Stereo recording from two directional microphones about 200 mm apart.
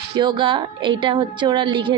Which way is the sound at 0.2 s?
25° right (ahead or behind).